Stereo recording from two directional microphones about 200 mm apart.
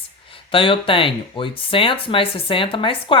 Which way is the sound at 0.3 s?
25° left (ahead or behind).